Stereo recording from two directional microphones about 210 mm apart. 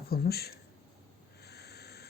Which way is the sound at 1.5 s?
50° left (ahead or behind).